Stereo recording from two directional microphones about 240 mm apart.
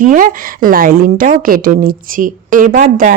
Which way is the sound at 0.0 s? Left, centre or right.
Right.